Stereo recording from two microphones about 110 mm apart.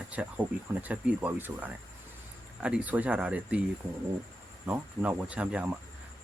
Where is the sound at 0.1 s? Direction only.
15° right (ahead or behind).